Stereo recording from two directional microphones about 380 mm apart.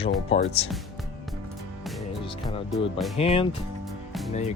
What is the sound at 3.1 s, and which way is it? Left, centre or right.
Speech, centre.